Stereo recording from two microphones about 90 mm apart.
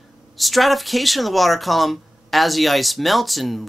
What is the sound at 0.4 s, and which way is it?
Speech, centre (ahead or behind).